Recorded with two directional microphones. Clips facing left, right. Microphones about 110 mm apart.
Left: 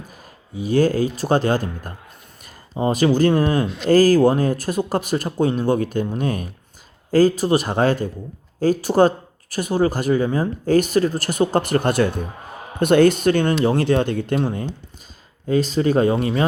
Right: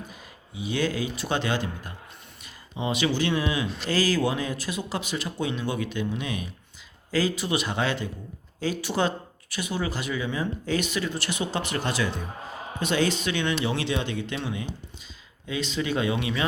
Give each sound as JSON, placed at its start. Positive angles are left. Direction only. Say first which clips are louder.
{"t": 0.5, "sound": "speech", "louder": "left 10 dB", "side_deg": 45}